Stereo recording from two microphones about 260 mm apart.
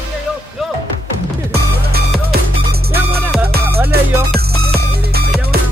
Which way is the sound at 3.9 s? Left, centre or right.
Right.